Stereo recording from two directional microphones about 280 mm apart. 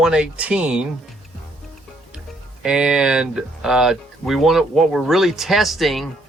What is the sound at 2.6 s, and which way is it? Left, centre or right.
Speech, centre.